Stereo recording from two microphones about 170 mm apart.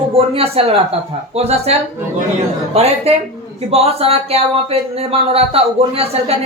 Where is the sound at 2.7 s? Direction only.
35° right (ahead or behind).